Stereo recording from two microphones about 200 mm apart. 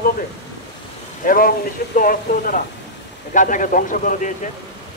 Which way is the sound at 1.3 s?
45° left (ahead or behind).